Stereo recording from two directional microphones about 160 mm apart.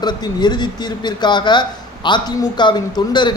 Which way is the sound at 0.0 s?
25° left (ahead or behind).